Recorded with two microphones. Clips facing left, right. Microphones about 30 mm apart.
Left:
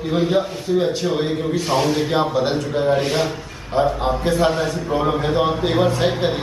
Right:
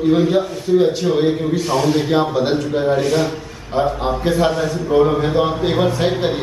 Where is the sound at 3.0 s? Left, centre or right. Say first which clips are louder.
Right 3 dB; left.